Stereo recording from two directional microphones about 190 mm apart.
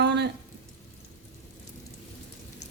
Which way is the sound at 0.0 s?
65° right (ahead or behind).